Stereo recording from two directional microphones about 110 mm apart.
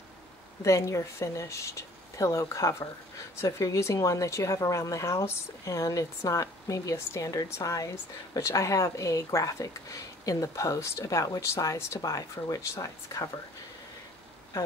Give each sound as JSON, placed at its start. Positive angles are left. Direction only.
{"t": 0.6, "sound": "speech", "side_deg": 30}